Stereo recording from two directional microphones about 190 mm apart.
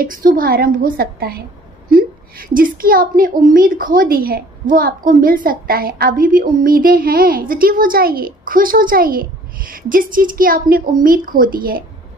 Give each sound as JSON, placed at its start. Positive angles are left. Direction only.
{"t": 0.0, "sound": "a woman's voice", "side_deg": -45}